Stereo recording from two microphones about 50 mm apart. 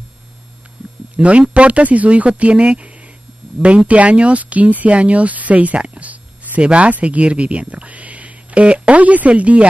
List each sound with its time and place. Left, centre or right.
1.1 s speech: right